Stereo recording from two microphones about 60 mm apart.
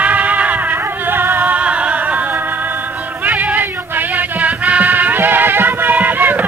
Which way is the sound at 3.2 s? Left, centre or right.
Right.